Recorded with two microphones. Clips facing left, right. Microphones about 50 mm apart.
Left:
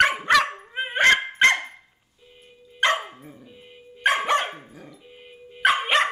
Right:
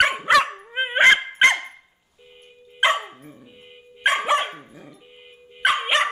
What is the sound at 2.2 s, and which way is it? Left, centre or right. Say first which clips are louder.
Dog: right 2 dB; right.